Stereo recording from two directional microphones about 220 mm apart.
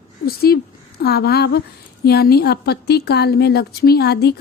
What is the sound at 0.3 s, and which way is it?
A woman's voice, 45° left (ahead or behind).